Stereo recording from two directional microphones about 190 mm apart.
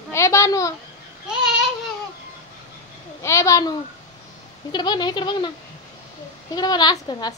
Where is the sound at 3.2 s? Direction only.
15° left (ahead or behind).